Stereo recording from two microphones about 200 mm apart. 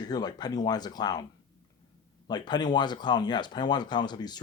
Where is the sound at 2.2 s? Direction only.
20° left (ahead or behind).